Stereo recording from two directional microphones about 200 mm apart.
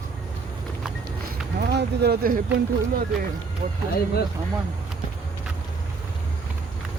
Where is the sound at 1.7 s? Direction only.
55° right (ahead or behind).